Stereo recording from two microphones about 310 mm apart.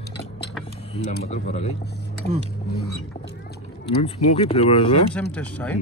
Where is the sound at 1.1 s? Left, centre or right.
Left.